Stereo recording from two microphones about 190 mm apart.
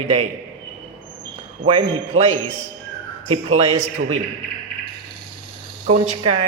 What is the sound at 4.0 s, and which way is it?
Speech, 65° right (ahead or behind).